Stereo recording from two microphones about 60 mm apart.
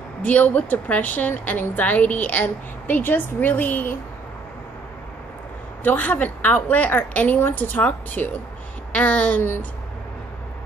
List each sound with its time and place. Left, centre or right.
0.2 s a woman's voice: left
5.9 s a woman's voice: left